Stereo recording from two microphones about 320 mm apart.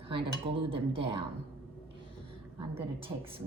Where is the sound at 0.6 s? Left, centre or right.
Centre.